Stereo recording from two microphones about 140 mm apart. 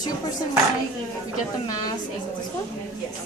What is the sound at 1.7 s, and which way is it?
Speech, 30° left (ahead or behind).